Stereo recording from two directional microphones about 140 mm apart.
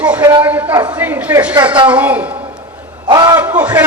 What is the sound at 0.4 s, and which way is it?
A woman's voice, 10° right (ahead or behind).